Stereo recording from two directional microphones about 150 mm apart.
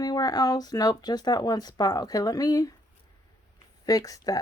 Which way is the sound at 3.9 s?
25° left (ahead or behind).